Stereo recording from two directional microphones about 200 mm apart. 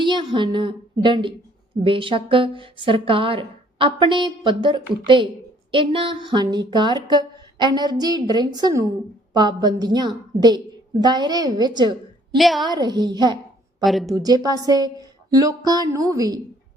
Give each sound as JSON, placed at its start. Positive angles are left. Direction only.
{"t": 0.0, "sound": "a woman's voice", "side_deg": -25}
{"t": 12.4, "sound": "speech", "side_deg": 0}
{"t": 12.6, "sound": "a woman's voice", "side_deg": -20}
{"t": 13.8, "sound": "speech", "side_deg": 0}
{"t": 14.2, "sound": "speech", "side_deg": -20}